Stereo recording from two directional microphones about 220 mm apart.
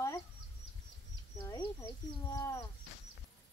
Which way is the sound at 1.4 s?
15° left (ahead or behind).